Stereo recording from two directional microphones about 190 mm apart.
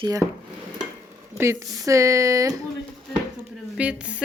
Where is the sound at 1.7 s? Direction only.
15° right (ahead or behind).